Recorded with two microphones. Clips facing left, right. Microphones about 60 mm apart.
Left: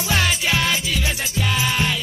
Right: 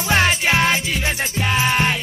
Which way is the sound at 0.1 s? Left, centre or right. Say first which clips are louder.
Right 4 dB; right.